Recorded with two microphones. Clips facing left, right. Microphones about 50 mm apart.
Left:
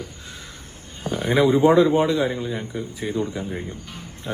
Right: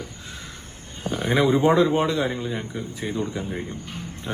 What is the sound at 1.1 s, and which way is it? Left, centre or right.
Speech, centre.